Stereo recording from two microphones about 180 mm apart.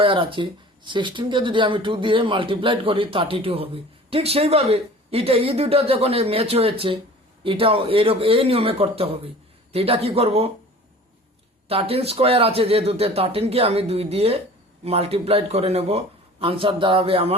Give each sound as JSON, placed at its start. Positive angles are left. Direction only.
{"t": 0.0, "sound": "speech", "side_deg": -30}
{"t": 11.7, "sound": "speech", "side_deg": -35}